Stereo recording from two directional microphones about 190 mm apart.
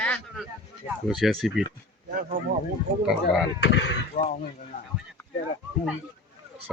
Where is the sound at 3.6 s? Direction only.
70° left (ahead or behind).